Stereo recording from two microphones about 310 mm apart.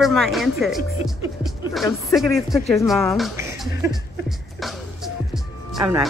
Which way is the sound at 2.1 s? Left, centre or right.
Centre.